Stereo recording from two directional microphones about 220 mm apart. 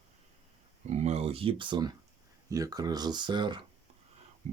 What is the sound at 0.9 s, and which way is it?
Speech, 30° right (ahead or behind).